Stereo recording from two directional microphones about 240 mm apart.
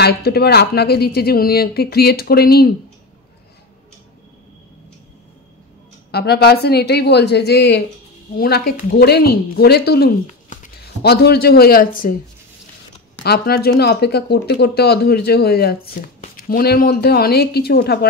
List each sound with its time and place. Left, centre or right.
0.0 s speech: left
6.1 s a woman's voice: left
13.2 s speech: left